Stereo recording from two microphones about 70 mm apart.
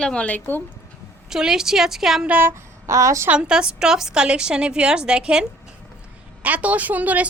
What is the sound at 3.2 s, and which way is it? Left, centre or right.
A woman's voice, centre.